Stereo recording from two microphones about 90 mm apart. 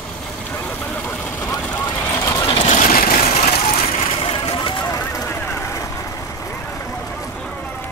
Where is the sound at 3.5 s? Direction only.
80° left; by 5.9 s 35° left (ahead or behind).